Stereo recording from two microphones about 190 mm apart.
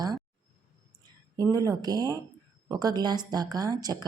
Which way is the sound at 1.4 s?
20° right (ahead or behind).